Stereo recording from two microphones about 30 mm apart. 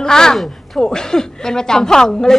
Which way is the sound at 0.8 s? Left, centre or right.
Left.